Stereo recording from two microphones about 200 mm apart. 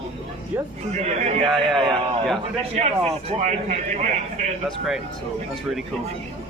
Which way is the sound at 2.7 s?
30° right (ahead or behind).